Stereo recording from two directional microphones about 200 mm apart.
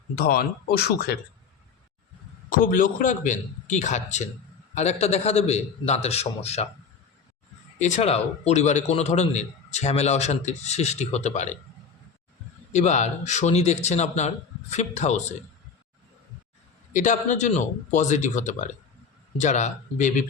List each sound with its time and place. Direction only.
0.2 s speech: 50° left (ahead or behind)
2.5 s a man's voice: 45° left (ahead or behind)
7.8 s a man's voice: 35° left (ahead or behind)
12.7 s a man's voice: 35° left (ahead or behind)
16.9 s a man's voice: 40° left (ahead or behind)